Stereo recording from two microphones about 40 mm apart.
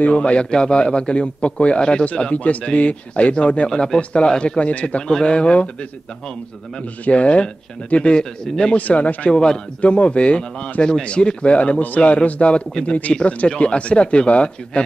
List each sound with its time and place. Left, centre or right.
0.0 s speech: left
2.3 s speech: left
4.6 s speech: left
7.1 s speech: left
8.7 s speech: left
9.3 s speech: centre
9.8 s speech: left